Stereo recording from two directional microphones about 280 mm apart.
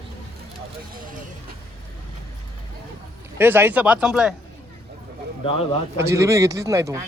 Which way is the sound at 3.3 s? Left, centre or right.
Centre.